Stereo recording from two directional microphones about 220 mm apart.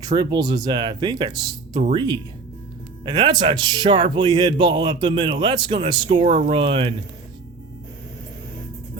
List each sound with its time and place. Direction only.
0.0 s speech: 20° right (ahead or behind)